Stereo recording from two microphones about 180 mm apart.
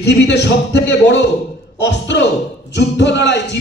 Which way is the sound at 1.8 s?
85° left.